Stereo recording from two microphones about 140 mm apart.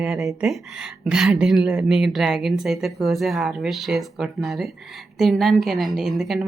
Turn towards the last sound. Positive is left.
turn(degrees=0)  # may be behind; listen again after turning